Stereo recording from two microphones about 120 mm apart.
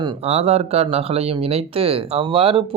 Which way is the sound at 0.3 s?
60° right (ahead or behind).